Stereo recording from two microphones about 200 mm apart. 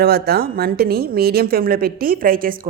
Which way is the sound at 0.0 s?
50° right (ahead or behind).